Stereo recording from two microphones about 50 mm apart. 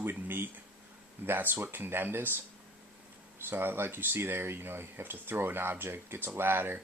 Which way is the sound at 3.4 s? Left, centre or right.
Right.